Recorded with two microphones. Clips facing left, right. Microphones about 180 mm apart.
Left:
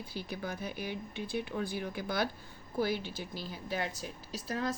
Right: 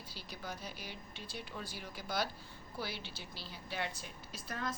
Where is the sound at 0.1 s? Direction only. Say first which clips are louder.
Left 7 dB; 55° left (ahead or behind).